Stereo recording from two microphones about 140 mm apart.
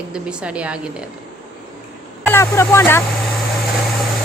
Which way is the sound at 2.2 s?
15° left (ahead or behind).